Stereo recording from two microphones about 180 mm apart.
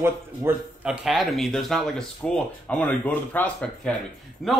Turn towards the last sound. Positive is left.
turn(degrees=0)  # may be behind; listen again after turning